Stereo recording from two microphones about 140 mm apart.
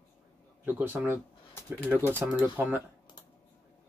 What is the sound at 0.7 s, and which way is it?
Speech, 15° right (ahead or behind).